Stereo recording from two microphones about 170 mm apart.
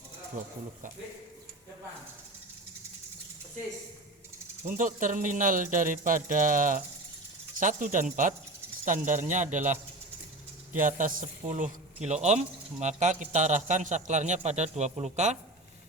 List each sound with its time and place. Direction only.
4.6 s a man's voice: 50° right (ahead or behind)
10.8 s a man's voice: 50° right (ahead or behind)